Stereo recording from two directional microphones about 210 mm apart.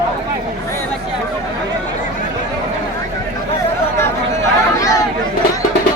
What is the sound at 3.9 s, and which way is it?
Chatter, 15° left (ahead or behind).